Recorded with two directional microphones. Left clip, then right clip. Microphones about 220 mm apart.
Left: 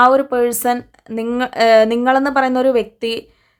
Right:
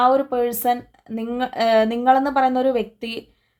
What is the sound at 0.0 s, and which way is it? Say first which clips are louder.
Speech: left 5 dB; 20° left (ahead or behind).